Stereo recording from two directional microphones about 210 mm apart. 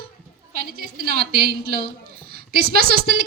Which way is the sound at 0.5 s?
45° right (ahead or behind).